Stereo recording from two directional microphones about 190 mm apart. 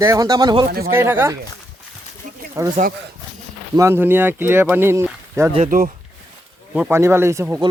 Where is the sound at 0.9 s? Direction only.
10° right (ahead or behind).